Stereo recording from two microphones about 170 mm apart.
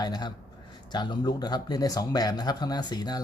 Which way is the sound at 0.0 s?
25° left (ahead or behind).